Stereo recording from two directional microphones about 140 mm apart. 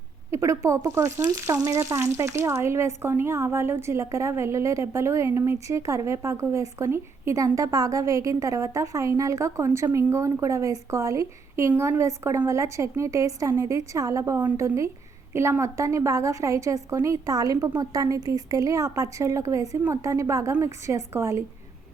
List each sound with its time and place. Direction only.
0.3 s speech: 20° right (ahead or behind)